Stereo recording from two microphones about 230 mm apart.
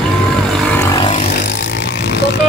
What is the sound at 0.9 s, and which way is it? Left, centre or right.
Vehicle, centre.